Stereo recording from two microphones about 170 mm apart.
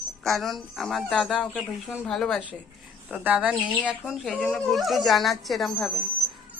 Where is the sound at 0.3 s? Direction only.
Centre (ahead or behind).